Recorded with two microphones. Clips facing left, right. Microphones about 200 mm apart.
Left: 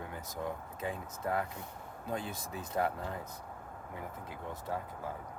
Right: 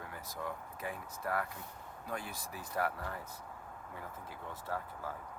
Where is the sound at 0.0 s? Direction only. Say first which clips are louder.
Left 4 dB; 25° left (ahead or behind).